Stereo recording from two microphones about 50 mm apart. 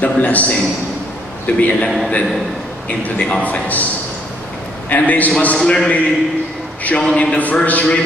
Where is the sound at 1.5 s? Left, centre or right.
Left.